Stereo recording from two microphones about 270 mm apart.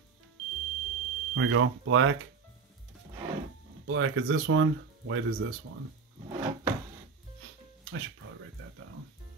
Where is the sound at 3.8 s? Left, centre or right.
Right.